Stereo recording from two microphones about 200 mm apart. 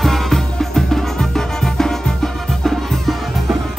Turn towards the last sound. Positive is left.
turn(degrees=0)  # may be behind; listen again after turning